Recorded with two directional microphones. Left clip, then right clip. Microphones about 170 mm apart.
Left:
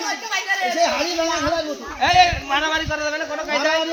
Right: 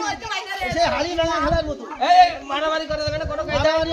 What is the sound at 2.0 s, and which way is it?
A man's voice, 85° right.